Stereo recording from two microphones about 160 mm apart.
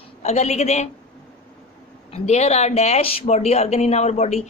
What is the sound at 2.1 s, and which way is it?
A woman's voice, 45° left (ahead or behind).